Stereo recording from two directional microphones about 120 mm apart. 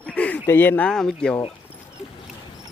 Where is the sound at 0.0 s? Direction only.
10° left (ahead or behind).